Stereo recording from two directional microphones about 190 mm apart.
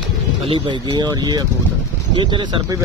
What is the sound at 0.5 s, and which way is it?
Speech, 25° right (ahead or behind).